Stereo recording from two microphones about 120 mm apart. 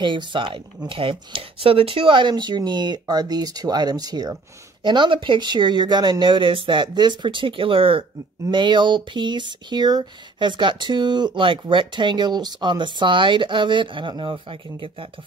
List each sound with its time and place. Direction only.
0.0 s speech: 40° right (ahead or behind)